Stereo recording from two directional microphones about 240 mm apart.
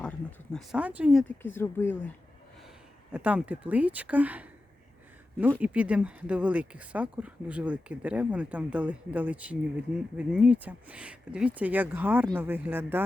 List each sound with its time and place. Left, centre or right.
0.0 s speech: centre
1.4 s speech: centre
3.1 s speech: centre
5.5 s speech: centre